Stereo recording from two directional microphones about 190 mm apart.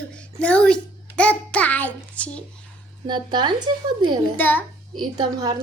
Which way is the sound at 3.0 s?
25° right (ahead or behind).